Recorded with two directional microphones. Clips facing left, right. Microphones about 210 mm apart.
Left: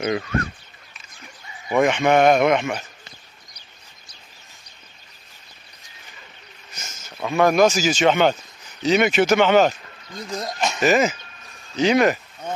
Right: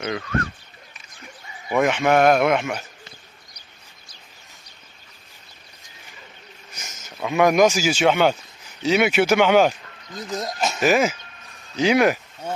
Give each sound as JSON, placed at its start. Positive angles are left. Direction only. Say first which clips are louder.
{"t": 0.0, "sound": "speech", "louder": "left 4 dB", "side_deg": 20}
{"t": 1.8, "sound": "a man's voice", "louder": "left 1 dB", "side_deg": -5}
{"t": 6.7, "sound": "speech", "louder": "even", "side_deg": -15}